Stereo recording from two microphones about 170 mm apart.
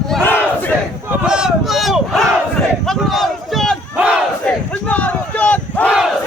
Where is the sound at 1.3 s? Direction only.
5° right (ahead or behind).